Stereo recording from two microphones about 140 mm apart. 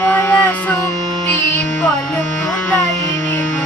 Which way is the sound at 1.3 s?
10° left (ahead or behind).